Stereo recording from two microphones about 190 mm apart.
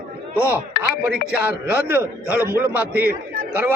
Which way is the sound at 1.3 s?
10° right (ahead or behind).